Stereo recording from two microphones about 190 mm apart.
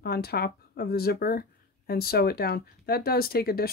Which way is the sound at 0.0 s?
55° left (ahead or behind).